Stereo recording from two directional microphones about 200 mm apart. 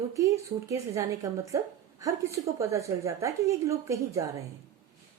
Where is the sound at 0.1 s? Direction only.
15° right (ahead or behind).